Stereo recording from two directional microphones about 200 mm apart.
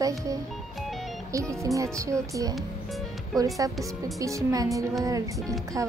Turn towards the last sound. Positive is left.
turn(degrees=-15)  # may be behind; listen again after turning